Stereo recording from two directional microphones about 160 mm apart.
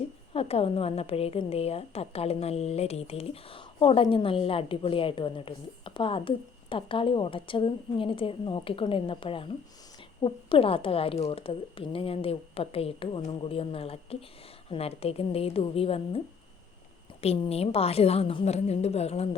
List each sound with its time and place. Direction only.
0.3 s a woman's voice: 35° left (ahead or behind)